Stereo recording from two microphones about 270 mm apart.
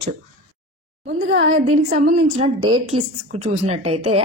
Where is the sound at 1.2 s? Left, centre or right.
Right.